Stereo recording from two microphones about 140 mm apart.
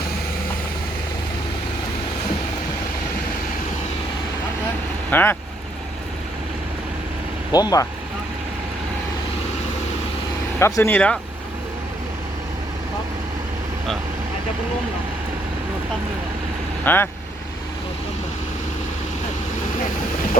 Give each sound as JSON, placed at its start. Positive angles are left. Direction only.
{"t": 5.1, "sound": "speech", "side_deg": 15}
{"t": 7.5, "sound": "speech", "side_deg": 25}
{"t": 10.6, "sound": "speech", "side_deg": 15}
{"t": 16.8, "sound": "speech", "side_deg": 15}